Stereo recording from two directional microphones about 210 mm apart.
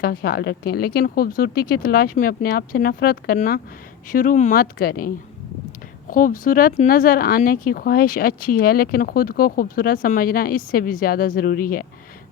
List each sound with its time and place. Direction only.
0.0 s speech: 50° left (ahead or behind)